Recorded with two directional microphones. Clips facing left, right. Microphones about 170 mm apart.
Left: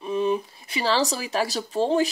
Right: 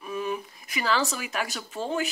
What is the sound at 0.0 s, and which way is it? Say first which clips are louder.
Speech: left 7 dB; 25° left (ahead or behind).